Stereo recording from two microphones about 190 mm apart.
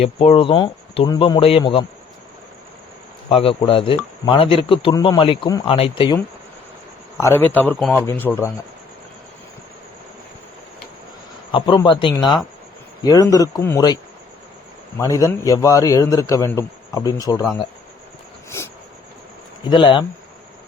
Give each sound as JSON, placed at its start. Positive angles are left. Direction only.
{"t": 0.0, "sound": "speech", "side_deg": 30}
{"t": 3.2, "sound": "speech", "side_deg": 30}
{"t": 7.2, "sound": "a man's voice", "side_deg": 15}
{"t": 11.5, "sound": "a man's voice", "side_deg": 25}
{"t": 19.7, "sound": "speech", "side_deg": 25}